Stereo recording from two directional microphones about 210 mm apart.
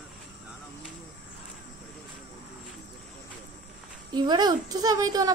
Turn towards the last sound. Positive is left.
turn(degrees=-15)  # may be behind; listen again after turning